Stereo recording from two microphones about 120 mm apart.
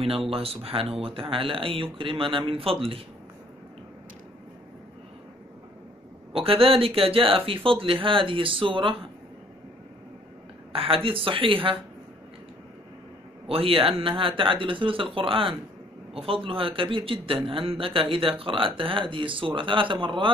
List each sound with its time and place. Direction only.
0.3 s speech: 50° right (ahead or behind)
6.3 s speech: 50° right (ahead or behind)
10.7 s speech: 50° right (ahead or behind)
13.5 s speech: 50° right (ahead or behind)